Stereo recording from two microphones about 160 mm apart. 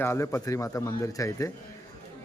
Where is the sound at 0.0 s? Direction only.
15° left (ahead or behind).